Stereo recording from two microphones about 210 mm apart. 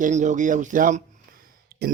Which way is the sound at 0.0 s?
35° right (ahead or behind).